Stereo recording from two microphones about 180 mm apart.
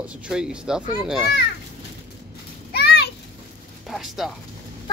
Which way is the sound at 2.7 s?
65° left (ahead or behind).